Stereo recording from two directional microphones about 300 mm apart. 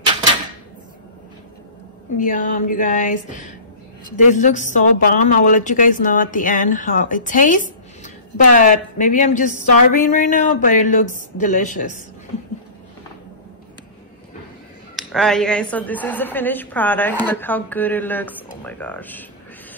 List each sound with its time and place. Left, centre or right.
2.1 s speech: left
15.0 s a woman's voice: centre